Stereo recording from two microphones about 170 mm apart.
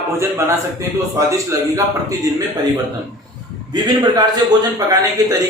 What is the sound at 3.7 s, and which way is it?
A man's voice, 25° right (ahead or behind).